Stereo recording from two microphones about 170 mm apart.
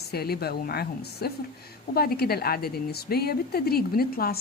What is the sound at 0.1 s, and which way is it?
A woman's voice, 65° left (ahead or behind).